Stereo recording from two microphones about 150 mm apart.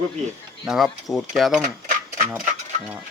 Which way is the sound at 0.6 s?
Centre (ahead or behind).